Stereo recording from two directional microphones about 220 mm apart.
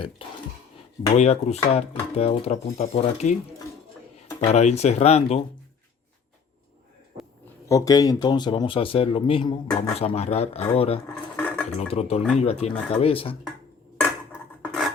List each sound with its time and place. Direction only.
0.2 s a sound: 25° left (ahead or behind)
1.1 s speech: 30° left (ahead or behind)
4.4 s speech: 30° left (ahead or behind)
7.7 s speech: 15° left (ahead or behind)
11.3 s a sound: 10° left (ahead or behind)
11.9 s speech: 25° left (ahead or behind)
14.7 s cutlery: centre (ahead or behind)